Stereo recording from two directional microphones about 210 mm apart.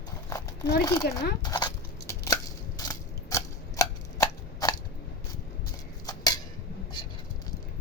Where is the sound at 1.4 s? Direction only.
20° left (ahead or behind).